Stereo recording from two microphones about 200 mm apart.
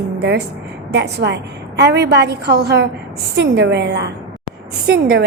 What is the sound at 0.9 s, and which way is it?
A woman's voice, 60° right (ahead or behind).